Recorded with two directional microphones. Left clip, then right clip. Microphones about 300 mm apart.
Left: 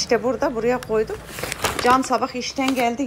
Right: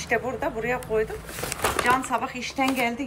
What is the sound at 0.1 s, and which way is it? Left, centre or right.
Speech, centre.